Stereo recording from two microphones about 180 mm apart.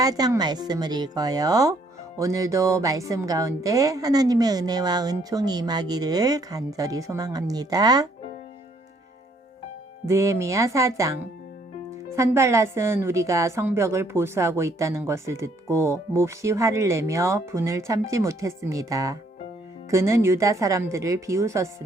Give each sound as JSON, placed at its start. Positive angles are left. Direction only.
{"t": 0.0, "sound": "a woman's voice", "side_deg": -20}
{"t": 10.1, "sound": "a woman's voice", "side_deg": -15}